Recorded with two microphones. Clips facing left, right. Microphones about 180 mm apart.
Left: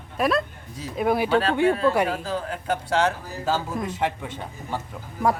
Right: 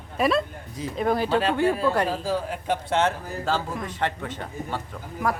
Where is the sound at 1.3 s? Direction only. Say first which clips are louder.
Left 2 dB; centre (ahead or behind).